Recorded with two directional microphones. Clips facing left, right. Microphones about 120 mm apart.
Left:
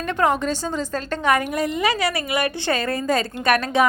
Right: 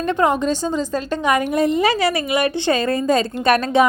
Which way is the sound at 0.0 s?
20° right (ahead or behind).